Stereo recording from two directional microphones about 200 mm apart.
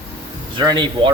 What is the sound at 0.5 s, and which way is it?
Speech, 25° right (ahead or behind).